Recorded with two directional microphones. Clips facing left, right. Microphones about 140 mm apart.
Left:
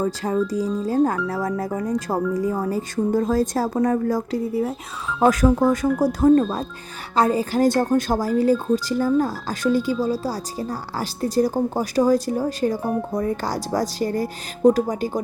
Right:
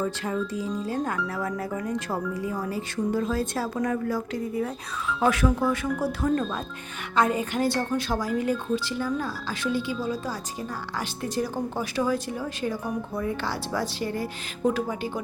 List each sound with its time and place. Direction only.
0.0 s speech: 35° left (ahead or behind)